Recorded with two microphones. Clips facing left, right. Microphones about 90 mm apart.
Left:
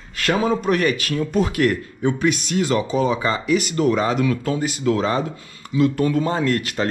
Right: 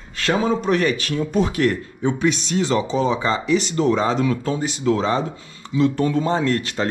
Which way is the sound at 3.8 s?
25° right (ahead or behind).